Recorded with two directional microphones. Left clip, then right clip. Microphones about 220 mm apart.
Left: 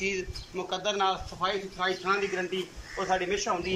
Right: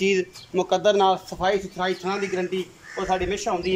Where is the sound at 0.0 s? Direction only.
35° right (ahead or behind).